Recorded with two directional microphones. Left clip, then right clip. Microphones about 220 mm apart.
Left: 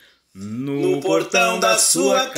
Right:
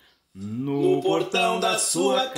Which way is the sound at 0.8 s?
30° left (ahead or behind).